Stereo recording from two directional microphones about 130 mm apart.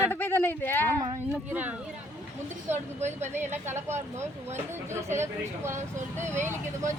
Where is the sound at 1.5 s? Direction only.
10° right (ahead or behind).